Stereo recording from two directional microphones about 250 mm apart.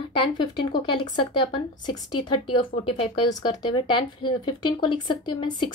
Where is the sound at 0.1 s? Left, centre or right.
Centre.